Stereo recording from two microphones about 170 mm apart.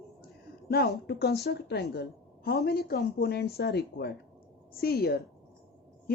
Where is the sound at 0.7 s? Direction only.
65° left (ahead or behind).